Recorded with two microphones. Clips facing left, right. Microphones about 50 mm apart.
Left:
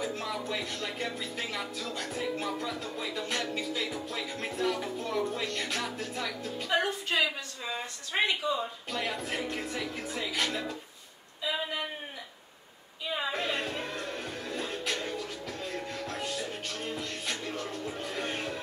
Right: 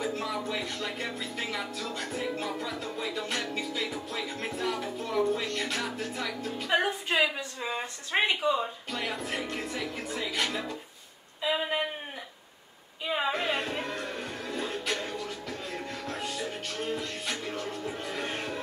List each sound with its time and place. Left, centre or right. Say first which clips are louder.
0.0 s speech: right 2 dB; centre
6.7 s a woman's voice: right 2 dB; right
8.9 s speech: even; centre
11.4 s a sound: right 4 dB; right
13.3 s music: right 2 dB; centre